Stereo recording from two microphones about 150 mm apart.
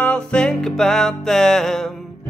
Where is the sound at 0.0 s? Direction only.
5° left (ahead or behind).